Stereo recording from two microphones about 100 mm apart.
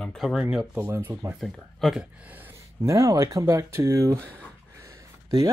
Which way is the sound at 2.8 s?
35° right (ahead or behind).